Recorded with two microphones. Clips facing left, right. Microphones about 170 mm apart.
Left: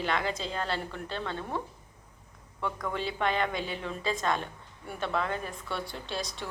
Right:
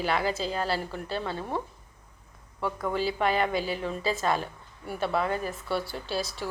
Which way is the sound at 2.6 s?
5° right (ahead or behind).